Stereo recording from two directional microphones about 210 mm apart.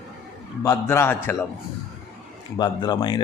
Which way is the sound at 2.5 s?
20° left (ahead or behind).